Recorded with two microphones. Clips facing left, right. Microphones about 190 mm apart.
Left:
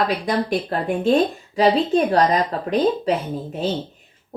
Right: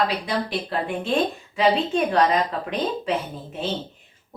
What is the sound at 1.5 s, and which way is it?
Speech, 35° left (ahead or behind).